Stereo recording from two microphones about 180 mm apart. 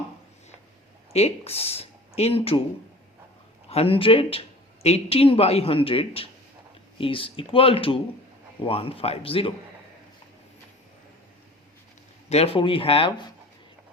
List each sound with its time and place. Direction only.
1.1 s speech: 35° left (ahead or behind)
3.7 s speech: 30° left (ahead or behind)
12.3 s speech: 35° left (ahead or behind)